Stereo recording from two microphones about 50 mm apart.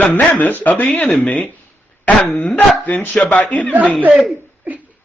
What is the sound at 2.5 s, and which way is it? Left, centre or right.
Speech, left.